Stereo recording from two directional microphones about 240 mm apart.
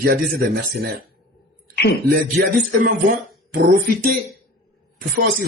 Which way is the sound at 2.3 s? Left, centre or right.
Right.